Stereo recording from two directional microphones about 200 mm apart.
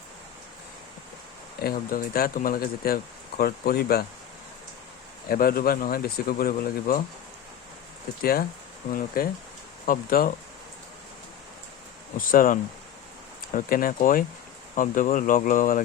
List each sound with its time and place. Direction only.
1.6 s speech: 45° left (ahead or behind)
5.3 s speech: 45° left (ahead or behind)
8.2 s speech: 50° left (ahead or behind)
12.1 s speech: 45° left (ahead or behind)